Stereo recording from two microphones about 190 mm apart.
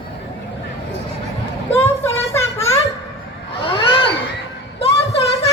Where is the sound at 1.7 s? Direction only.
10° left (ahead or behind).